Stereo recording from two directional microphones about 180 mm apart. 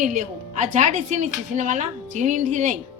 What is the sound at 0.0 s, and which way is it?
Speech, 45° right (ahead or behind).